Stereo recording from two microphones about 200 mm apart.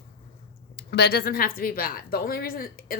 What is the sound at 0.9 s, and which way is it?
A woman's voice, 50° left (ahead or behind).